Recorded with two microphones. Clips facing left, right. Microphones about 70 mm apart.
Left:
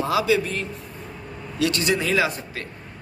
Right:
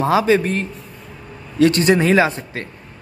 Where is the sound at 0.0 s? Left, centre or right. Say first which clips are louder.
Right 6 dB; right.